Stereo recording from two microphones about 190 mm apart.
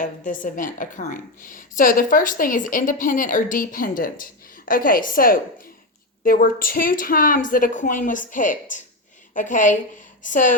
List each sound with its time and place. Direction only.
0.0 s a woman's voice: 45° left (ahead or behind)